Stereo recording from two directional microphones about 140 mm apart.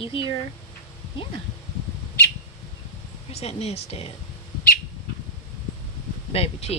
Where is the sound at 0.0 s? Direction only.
40° left (ahead or behind).